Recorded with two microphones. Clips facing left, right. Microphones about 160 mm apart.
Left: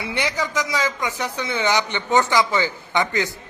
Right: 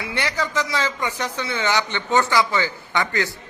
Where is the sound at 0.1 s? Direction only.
15° left (ahead or behind).